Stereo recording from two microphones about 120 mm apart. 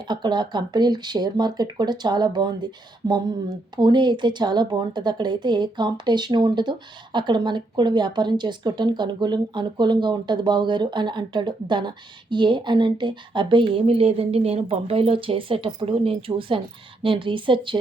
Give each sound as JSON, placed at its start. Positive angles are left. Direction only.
{"t": 0.1, "sound": "a woman's voice", "side_deg": -40}